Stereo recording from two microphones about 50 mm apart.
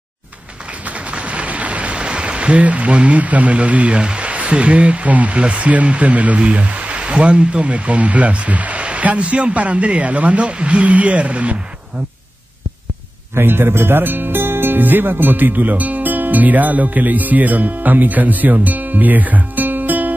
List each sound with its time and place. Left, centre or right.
0.8 s speech: right
13.3 s speech: right